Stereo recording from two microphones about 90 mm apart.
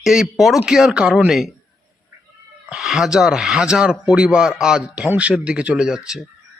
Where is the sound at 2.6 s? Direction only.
Centre (ahead or behind).